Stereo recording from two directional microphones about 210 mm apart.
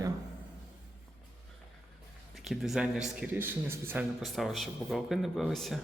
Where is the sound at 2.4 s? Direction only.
Centre (ahead or behind).